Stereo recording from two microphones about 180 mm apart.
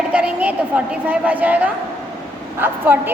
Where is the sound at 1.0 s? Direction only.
10° right (ahead or behind).